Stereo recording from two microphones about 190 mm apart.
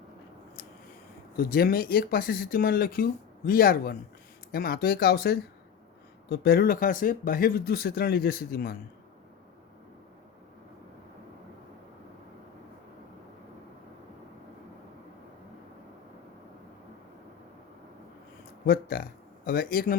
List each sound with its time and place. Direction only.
1.4 s speech: 50° left (ahead or behind)
18.6 s speech: 50° left (ahead or behind)